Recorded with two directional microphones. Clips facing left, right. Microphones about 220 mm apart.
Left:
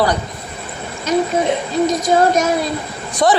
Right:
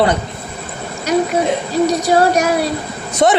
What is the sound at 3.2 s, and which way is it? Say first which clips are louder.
Speech: right 2 dB; 25° right (ahead or behind).